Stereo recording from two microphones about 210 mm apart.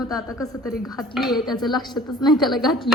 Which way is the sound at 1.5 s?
Centre (ahead or behind).